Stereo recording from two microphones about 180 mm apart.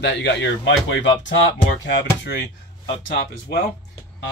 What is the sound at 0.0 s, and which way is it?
Speech, 75° left (ahead or behind).